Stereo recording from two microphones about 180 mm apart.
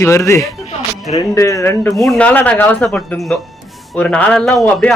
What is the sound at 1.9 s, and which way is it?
A man's voice, centre (ahead or behind).